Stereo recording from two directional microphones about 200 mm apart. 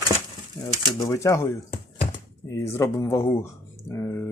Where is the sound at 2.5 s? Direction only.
15° left (ahead or behind).